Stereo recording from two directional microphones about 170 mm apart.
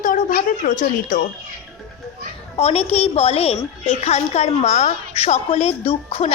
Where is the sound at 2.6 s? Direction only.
40° left (ahead or behind).